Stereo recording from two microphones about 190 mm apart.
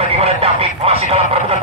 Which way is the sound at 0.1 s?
30° right (ahead or behind).